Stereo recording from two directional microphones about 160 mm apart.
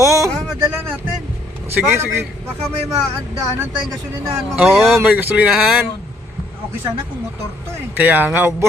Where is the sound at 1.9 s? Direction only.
15° right (ahead or behind).